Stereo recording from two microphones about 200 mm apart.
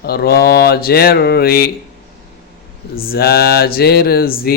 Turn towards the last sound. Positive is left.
turn(degrees=50)  # may be behind; listen again after turning